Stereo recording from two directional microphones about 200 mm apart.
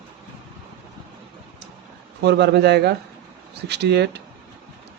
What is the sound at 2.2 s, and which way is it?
Speech, 55° right (ahead or behind).